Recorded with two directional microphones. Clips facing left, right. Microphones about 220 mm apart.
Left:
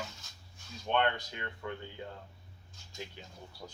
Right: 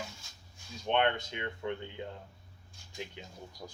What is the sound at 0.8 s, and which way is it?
Speech, 20° right (ahead or behind).